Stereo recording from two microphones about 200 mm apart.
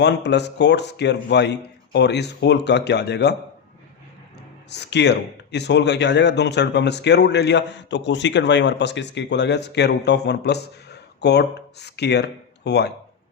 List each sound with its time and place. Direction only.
0.0 s speech: 60° left (ahead or behind)
4.7 s speech: 60° left (ahead or behind)